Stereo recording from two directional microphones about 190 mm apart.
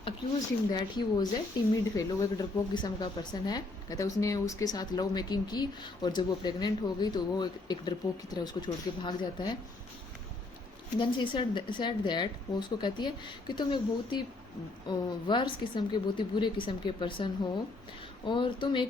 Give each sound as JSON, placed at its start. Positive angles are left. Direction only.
{"t": 0.7, "sound": "speech", "side_deg": 20}
{"t": 10.9, "sound": "speech", "side_deg": 25}
{"t": 18.3, "sound": "speech", "side_deg": 25}